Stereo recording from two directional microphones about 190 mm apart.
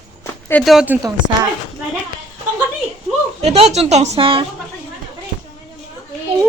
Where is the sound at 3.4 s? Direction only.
35° right (ahead or behind).